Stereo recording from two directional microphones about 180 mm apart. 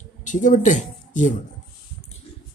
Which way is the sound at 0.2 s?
45° left (ahead or behind).